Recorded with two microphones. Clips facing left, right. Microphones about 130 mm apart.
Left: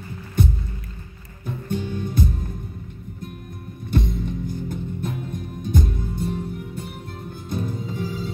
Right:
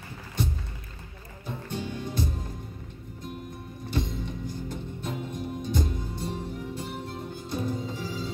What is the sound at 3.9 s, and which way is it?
Music, 50° left (ahead or behind).